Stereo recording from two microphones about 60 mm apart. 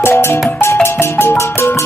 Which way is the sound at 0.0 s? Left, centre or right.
Left.